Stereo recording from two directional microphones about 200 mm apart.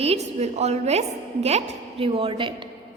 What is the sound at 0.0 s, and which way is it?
A woman's voice, 30° right (ahead or behind).